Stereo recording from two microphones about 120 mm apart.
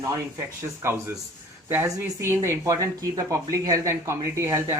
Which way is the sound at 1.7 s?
20° right (ahead or behind).